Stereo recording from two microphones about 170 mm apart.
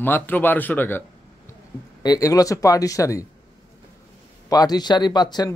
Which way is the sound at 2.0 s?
20° left (ahead or behind).